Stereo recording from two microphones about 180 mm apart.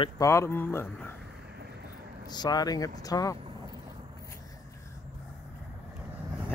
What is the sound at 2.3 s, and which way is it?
Speech, 25° left (ahead or behind).